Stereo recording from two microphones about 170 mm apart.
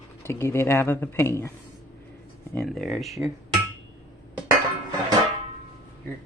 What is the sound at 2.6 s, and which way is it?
Speech, centre (ahead or behind).